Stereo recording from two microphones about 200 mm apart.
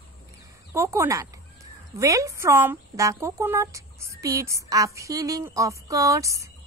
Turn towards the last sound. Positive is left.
turn(degrees=-15)  # may be behind; listen again after turning